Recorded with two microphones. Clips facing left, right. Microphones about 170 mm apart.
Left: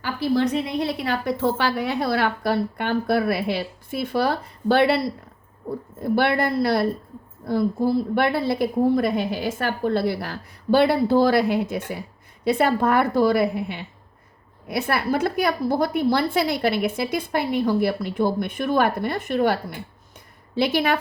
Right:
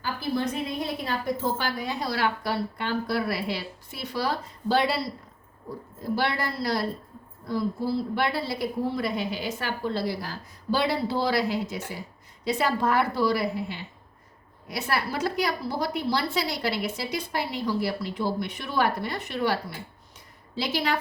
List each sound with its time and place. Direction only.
0.0 s a woman's voice: 70° left (ahead or behind)
6.0 s a woman's voice: 60° left (ahead or behind)
20.6 s a woman's voice: 55° left (ahead or behind)